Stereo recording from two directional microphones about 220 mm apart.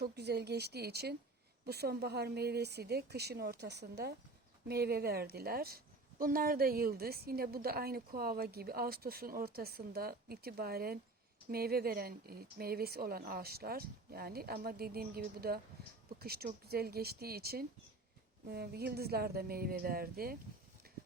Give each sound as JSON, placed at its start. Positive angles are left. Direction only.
{"t": 0.0, "sound": "speech", "side_deg": -50}